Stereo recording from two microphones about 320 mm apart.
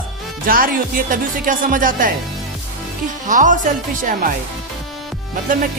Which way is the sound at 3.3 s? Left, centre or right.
Right.